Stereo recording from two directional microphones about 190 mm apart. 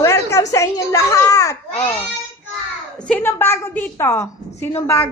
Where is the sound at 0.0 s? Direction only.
15° left (ahead or behind).